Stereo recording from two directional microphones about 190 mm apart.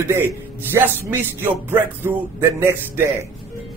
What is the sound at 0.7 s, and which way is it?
A man's voice, 10° right (ahead or behind).